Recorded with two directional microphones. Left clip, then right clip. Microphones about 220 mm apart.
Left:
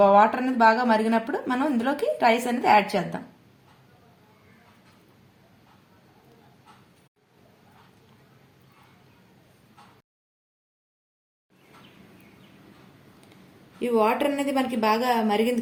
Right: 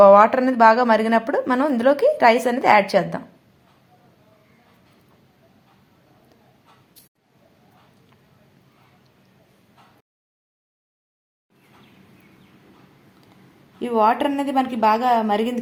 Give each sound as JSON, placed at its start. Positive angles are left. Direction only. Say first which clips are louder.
{"t": 0.0, "sound": "a woman's voice", "louder": "right 6 dB", "side_deg": -45}
{"t": 13.7, "sound": "a woman's voice", "louder": "right 4 dB", "side_deg": -30}